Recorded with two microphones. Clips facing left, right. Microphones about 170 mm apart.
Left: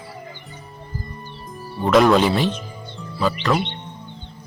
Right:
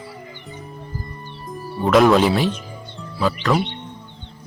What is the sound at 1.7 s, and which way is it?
Speech, centre (ahead or behind).